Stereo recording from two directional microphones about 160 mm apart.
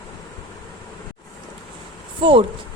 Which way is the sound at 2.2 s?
30° right (ahead or behind).